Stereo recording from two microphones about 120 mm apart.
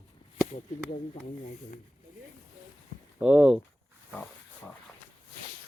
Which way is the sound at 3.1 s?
10° right (ahead or behind).